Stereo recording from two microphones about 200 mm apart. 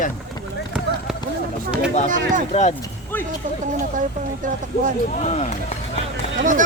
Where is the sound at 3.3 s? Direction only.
40° right (ahead or behind).